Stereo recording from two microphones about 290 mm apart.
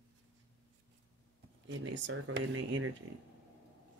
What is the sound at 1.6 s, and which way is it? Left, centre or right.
Speech, right.